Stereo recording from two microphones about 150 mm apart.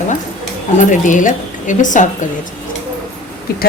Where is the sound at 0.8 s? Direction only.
60° left (ahead or behind).